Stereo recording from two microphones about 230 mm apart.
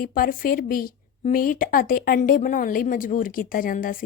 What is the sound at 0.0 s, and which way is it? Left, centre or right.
Speech, left.